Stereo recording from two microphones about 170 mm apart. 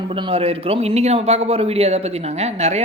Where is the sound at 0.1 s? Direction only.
35° right (ahead or behind).